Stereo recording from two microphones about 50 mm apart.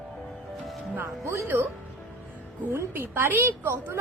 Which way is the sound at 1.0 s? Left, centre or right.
Right.